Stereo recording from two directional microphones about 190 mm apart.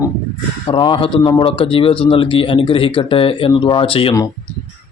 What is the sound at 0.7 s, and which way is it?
Speech, 25° left (ahead or behind).